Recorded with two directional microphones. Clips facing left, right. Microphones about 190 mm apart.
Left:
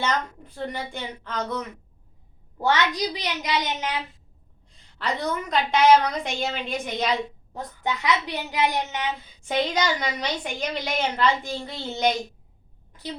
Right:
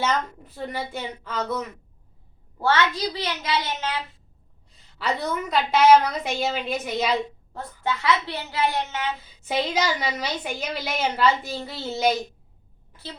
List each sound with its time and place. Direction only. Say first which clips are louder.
0.0 s a woman's voice: right 1 dB; 5° right (ahead or behind)
2.6 s a woman's voice: even; 15° left (ahead or behind)
4.9 s a woman's voice: right 1 dB; 5° right (ahead or behind)
7.5 s a woman's voice: even; 15° left (ahead or behind)
9.4 s a woman's voice: even; 5° right (ahead or behind)